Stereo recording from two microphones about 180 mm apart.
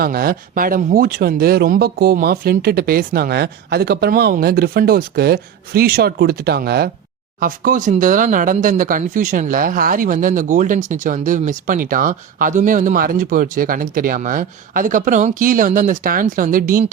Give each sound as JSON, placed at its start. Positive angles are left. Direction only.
{"t": 0.0, "sound": "speech", "side_deg": -55}
{"t": 7.3, "sound": "speech", "side_deg": -50}